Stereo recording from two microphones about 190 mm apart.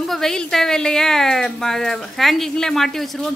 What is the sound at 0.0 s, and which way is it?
A woman's voice, centre (ahead or behind).